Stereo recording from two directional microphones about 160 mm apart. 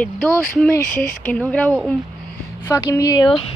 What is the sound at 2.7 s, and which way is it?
Speech, 20° left (ahead or behind).